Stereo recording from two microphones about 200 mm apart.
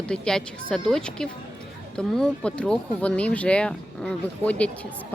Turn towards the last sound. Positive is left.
turn(degrees=5)  # may be behind; listen again after turning